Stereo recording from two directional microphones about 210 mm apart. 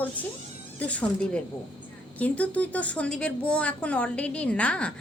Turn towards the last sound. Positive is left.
turn(degrees=5)  # may be behind; listen again after turning